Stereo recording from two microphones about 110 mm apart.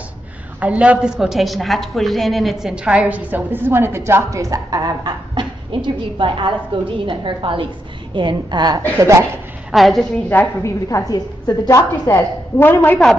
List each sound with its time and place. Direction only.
0.6 s a woman's voice: 10° right (ahead or behind); by 8.8 s 40° right (ahead or behind)
8.9 s speech: 25° right (ahead or behind)
9.7 s a woman's voice: centre (ahead or behind)
10.6 s a woman's voice: 30° left (ahead or behind)